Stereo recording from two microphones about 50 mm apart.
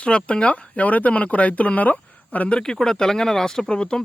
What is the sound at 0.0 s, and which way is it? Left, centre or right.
Speech, left.